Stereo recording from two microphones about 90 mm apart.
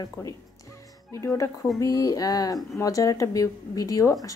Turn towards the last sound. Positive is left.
turn(degrees=40)  # may be behind; listen again after turning